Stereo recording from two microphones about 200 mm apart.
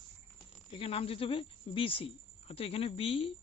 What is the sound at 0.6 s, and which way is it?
A woman's voice, 30° left (ahead or behind).